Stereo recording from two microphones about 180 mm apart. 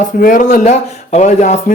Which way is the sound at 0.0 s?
50° left (ahead or behind).